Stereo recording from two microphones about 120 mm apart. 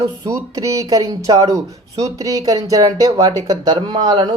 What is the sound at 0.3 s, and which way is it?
Speech, 30° right (ahead or behind).